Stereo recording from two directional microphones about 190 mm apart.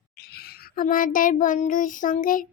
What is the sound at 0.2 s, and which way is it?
Child singing, 55° left (ahead or behind).